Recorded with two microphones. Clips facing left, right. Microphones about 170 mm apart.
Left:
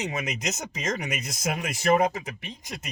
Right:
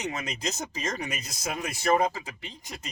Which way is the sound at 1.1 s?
30° right (ahead or behind).